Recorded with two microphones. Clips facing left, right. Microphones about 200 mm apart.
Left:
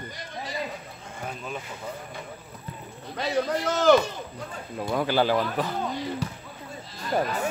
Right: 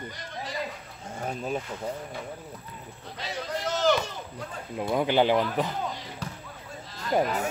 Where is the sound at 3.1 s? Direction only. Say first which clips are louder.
Left 8 dB; 55° left (ahead or behind).